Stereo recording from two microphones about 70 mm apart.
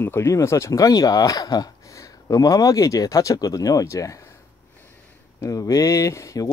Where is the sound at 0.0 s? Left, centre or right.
Left.